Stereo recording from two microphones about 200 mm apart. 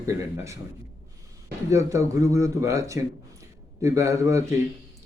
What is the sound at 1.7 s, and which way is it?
Speech, 15° right (ahead or behind).